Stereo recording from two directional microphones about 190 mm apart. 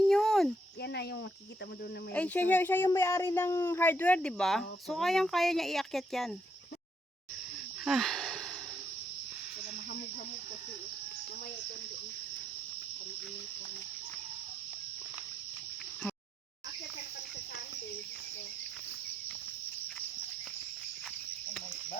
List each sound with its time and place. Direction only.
0.0 s a sound: centre (ahead or behind)
0.8 s cricket: 60° left (ahead or behind)
2.1 s speech: 10° left (ahead or behind)
7.9 s wheeze: centre (ahead or behind)